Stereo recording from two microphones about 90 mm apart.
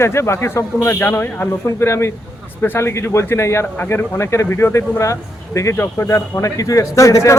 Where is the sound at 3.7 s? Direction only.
20° left (ahead or behind).